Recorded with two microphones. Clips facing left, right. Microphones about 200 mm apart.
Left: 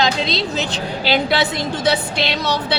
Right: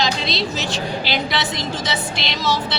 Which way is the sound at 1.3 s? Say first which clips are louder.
Left 5 dB; 60° left (ahead or behind).